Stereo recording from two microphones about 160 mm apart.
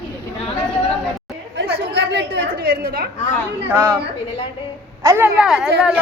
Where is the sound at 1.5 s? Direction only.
90° right; by 3.1 s 70° right (ahead or behind).